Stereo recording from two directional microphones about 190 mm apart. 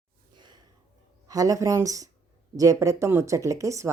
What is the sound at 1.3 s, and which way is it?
Speech, 20° right (ahead or behind).